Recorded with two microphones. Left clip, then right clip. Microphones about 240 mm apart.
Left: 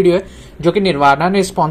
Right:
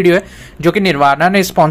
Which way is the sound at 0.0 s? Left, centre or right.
Right.